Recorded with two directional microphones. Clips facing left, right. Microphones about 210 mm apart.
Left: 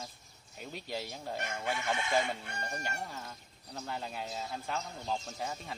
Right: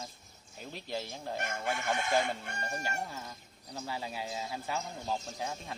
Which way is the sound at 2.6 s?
5° right (ahead or behind).